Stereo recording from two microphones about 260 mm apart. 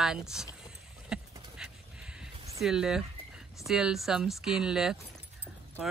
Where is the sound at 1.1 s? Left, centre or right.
Centre.